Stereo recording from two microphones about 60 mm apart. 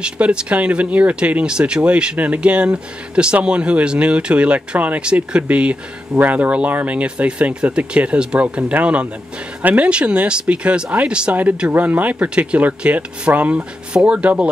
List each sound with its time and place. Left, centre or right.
0.0 s speech: centre